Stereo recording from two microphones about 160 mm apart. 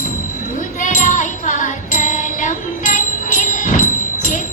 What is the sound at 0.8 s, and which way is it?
Music, 55° left (ahead or behind).